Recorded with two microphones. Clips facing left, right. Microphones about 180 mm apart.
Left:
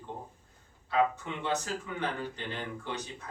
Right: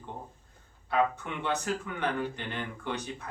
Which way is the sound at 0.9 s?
60° right (ahead or behind).